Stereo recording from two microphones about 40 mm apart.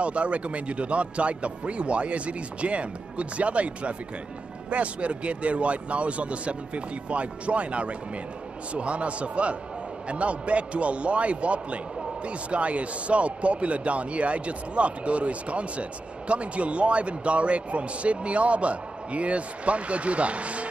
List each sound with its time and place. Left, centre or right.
0.0 s speech: right